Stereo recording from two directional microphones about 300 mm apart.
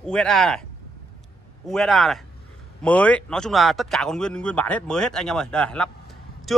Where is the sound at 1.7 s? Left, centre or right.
Centre.